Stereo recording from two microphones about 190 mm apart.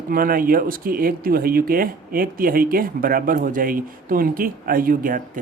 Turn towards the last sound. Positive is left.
turn(degrees=-45)  # may be behind; listen again after turning